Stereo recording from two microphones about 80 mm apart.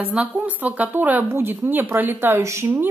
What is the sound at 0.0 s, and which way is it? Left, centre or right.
Speech, centre.